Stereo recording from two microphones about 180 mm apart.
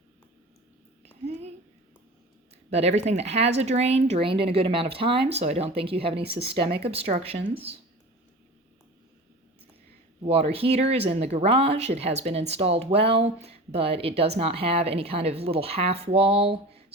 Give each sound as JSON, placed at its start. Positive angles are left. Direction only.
{"t": 2.6, "sound": "speech", "side_deg": -35}
{"t": 10.2, "sound": "speech", "side_deg": -35}